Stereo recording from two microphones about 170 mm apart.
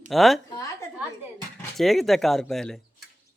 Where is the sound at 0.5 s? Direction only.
20° left (ahead or behind).